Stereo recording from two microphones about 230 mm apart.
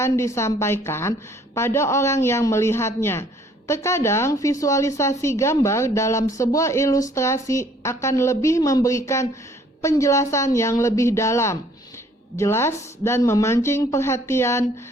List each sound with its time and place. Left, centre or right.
0.0 s a woman's voice: centre